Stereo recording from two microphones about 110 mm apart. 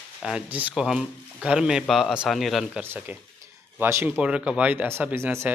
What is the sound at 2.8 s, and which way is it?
Speech, 20° right (ahead or behind).